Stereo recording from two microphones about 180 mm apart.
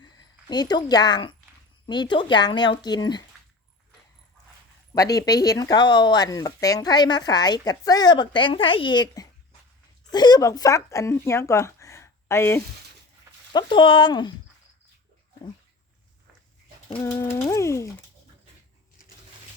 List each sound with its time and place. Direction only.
0.0 s speech: 25° left (ahead or behind)
4.9 s speech: 20° left (ahead or behind)
13.5 s speech: 25° left (ahead or behind)
16.9 s speech: 15° left (ahead or behind)